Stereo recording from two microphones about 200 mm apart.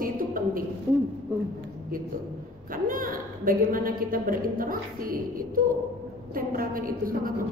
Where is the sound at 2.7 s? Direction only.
45° right (ahead or behind).